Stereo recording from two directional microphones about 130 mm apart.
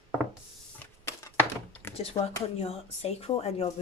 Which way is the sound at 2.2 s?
50° left (ahead or behind).